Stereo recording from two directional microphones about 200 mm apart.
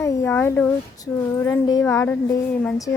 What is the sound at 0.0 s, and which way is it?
A woman's voice, 15° left (ahead or behind).